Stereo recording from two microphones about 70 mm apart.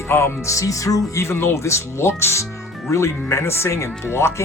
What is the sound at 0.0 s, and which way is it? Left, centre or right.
Music, left.